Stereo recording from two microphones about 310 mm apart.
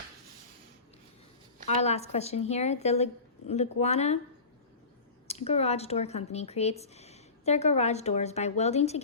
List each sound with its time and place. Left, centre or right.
1.6 s speech: left
5.3 s speech: centre